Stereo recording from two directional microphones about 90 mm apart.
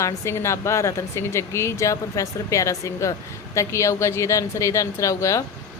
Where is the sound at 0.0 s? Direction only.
30° left (ahead or behind).